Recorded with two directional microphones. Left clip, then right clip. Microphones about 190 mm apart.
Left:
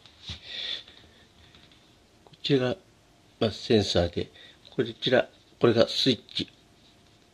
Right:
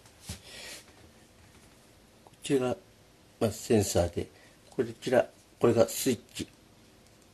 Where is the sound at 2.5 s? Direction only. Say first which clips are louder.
Left 3 dB; 35° left (ahead or behind).